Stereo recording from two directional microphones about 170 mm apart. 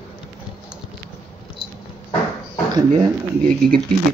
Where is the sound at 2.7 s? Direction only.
25° right (ahead or behind).